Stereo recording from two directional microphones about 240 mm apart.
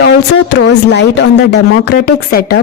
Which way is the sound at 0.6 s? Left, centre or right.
Left.